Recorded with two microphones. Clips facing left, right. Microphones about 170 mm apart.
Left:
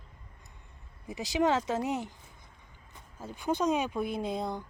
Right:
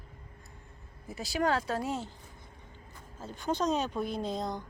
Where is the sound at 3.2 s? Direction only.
10° left (ahead or behind).